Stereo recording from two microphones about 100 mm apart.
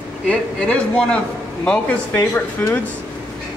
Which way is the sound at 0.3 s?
10° left (ahead or behind).